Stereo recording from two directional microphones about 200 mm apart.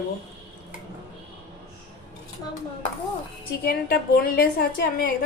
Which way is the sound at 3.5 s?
50° left (ahead or behind).